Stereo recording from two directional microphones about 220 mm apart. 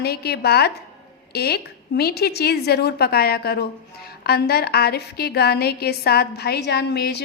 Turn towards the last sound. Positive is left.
turn(degrees=45)  # may be behind; listen again after turning